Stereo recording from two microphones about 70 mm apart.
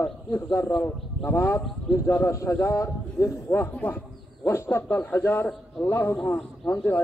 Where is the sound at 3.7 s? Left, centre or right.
Left.